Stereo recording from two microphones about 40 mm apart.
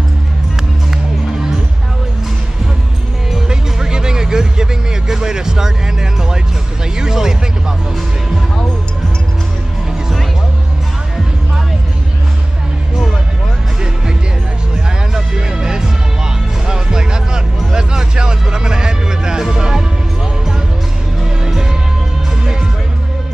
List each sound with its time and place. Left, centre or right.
3.4 s music: centre
7.0 s a sound: centre
15.1 s music: centre
21.4 s music: centre